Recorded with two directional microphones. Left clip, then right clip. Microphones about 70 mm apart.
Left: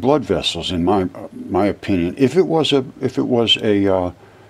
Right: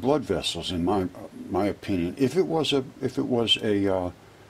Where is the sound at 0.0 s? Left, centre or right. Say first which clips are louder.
Left 8 dB; centre.